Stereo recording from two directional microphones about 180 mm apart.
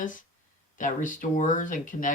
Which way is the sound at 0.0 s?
45° left (ahead or behind).